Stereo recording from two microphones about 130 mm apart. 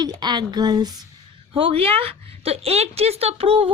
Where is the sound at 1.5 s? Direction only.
45° right (ahead or behind).